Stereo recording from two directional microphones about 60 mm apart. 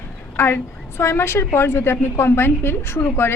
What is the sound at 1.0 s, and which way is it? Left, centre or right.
A woman's voice, left.